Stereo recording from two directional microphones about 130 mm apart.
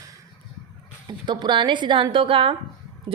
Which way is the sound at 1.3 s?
35° right (ahead or behind).